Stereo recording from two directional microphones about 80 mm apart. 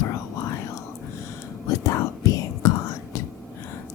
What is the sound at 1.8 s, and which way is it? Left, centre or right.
Whispering, left.